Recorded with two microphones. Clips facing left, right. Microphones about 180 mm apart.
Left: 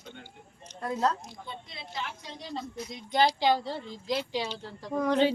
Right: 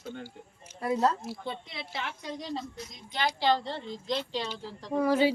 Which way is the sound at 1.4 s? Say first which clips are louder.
Right 5 dB; 80° right.